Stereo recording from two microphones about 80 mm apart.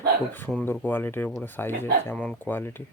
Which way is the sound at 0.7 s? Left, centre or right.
Left.